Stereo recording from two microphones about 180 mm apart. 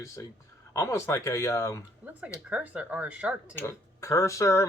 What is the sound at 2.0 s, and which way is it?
Speech, 10° right (ahead or behind).